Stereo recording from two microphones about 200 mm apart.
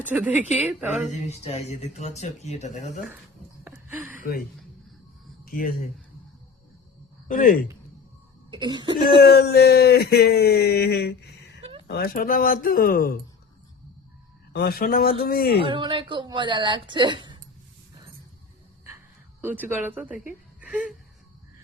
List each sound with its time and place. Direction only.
0.1 s a woman's voice: 10° right (ahead or behind)
1.3 s speech: 30° left (ahead or behind)
3.6 s a sound: 10° right (ahead or behind)
4.1 s a sound: 40° left (ahead or behind)
5.5 s speech: 45° left (ahead or behind)
7.3 s speech: 40° left (ahead or behind)
8.4 s a woman's voice: 20° right (ahead or behind)
9.0 s speech: 50° left (ahead or behind)
14.5 s speech: 50° left (ahead or behind)
15.6 s a woman's voice: 25° right (ahead or behind)
19.4 s speech: 10° right (ahead or behind)
20.6 s a sound: 5° right (ahead or behind)